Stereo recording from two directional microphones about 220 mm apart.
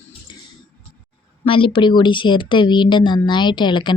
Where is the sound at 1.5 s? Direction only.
25° left (ahead or behind).